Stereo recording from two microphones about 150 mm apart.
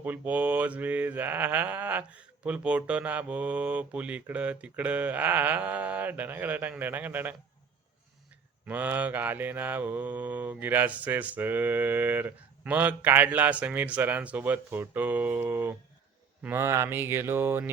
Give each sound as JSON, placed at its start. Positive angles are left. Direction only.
{"t": 0.0, "sound": "mantra", "side_deg": -10}
{"t": 8.6, "sound": "mantra", "side_deg": -10}